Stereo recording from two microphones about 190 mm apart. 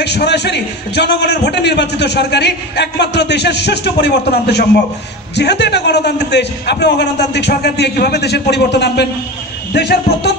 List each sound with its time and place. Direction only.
0.0 s a man's voice: 60° left (ahead or behind)